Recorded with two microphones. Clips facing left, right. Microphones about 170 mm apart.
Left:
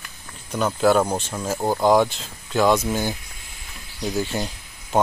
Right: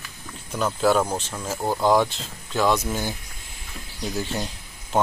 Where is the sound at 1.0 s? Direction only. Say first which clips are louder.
Left 3 dB; 15° left (ahead or behind).